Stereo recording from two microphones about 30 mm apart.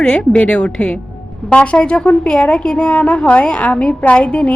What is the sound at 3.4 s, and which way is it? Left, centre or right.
A woman's voice, left.